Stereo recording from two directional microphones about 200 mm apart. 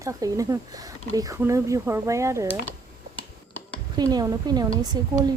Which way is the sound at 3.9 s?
20° right (ahead or behind).